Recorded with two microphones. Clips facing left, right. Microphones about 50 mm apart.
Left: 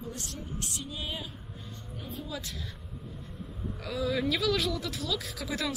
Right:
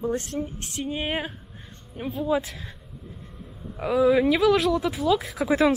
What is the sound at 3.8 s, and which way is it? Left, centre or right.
Speech, right.